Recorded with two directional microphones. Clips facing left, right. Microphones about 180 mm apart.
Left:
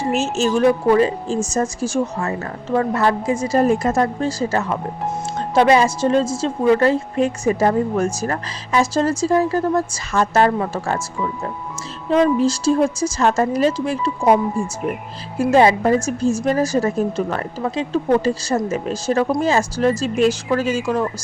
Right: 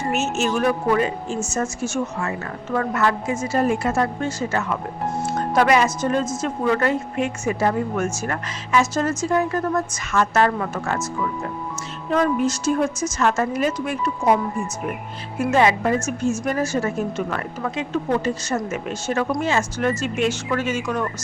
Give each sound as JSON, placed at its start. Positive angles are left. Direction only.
{"t": 0.1, "sound": "speech", "side_deg": 30}
{"t": 12.0, "sound": "speech", "side_deg": 25}
{"t": 15.4, "sound": "speech", "side_deg": 30}